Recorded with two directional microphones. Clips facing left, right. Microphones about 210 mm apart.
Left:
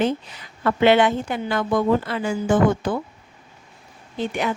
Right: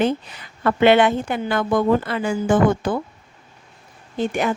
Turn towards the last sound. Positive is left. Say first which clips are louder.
# right 3 dB
turn(degrees=-45)  # may be behind; listen again after turning